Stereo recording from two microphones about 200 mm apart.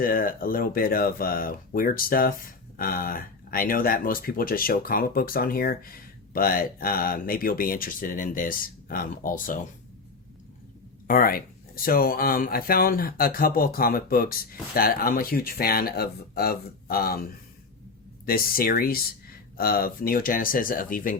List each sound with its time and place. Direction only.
0.0 s speech: 45° left (ahead or behind)
11.1 s speech: 45° left (ahead or behind)
18.3 s speech: 45° left (ahead or behind)